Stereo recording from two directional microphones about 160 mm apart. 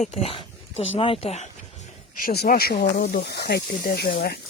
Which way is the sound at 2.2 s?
75° left (ahead or behind).